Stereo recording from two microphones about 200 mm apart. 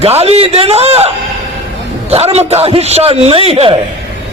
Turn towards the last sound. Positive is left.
turn(degrees=-30)  # may be behind; listen again after turning